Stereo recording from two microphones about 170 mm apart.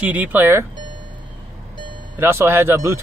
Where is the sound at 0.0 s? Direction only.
10° right (ahead or behind).